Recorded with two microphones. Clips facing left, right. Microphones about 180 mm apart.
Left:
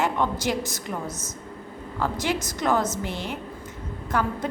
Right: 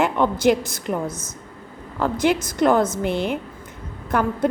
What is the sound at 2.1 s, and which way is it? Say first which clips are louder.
A woman's voice: right 7 dB; 55° right (ahead or behind).